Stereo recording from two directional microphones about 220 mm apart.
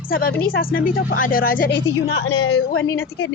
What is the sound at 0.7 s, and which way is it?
Speech, 40° left (ahead or behind).